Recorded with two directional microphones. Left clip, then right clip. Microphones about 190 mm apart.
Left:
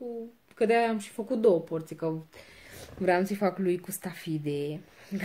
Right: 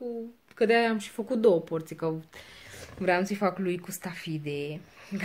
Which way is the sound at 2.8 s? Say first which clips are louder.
Even; 25° left (ahead or behind).